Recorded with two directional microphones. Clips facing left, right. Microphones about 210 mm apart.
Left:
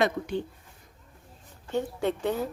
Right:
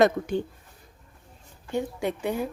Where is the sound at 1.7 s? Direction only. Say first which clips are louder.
Even; 10° right (ahead or behind).